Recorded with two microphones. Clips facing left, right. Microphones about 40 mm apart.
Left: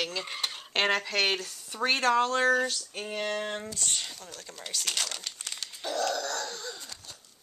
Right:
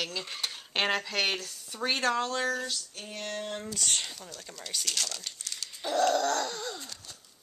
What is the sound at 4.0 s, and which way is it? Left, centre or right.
Speech, centre.